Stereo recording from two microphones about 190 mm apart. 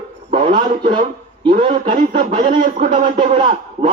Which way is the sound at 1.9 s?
40° right (ahead or behind).